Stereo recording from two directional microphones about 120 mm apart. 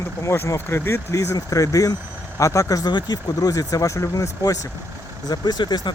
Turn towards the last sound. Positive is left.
turn(degrees=35)  # may be behind; listen again after turning